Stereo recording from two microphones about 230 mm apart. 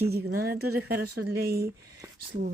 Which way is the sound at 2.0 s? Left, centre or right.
Centre.